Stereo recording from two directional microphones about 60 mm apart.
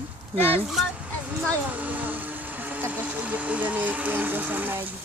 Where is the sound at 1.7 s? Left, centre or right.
Right.